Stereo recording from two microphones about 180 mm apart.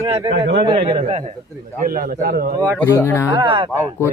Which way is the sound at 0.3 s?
80° right.